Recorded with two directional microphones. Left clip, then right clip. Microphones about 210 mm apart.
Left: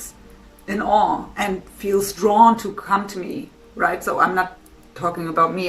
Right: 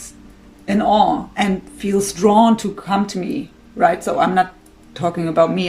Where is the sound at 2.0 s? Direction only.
30° right (ahead or behind).